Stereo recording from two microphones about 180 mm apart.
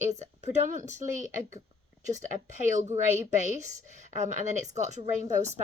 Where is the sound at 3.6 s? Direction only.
40° right (ahead or behind).